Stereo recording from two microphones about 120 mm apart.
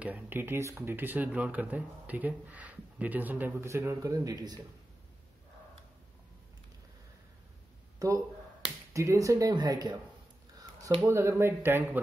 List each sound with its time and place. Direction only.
0.0 s speech: 15° right (ahead or behind); by 4.6 s 35° right (ahead or behind)
8.0 s speech: 30° right (ahead or behind)
11.1 s speech: 20° right (ahead or behind)